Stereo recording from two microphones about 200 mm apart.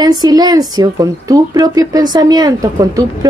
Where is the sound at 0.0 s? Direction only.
20° right (ahead or behind).